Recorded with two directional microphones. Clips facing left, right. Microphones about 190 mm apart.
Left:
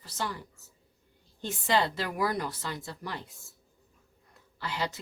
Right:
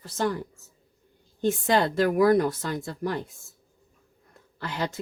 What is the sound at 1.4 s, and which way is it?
Speech, 50° right (ahead or behind).